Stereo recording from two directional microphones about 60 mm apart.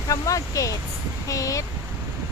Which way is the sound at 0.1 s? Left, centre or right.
Left.